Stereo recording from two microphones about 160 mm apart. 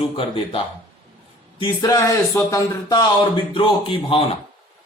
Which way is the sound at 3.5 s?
30° left (ahead or behind).